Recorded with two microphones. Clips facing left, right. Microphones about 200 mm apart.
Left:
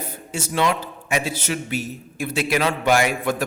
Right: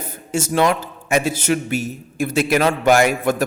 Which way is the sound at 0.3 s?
45° right (ahead or behind).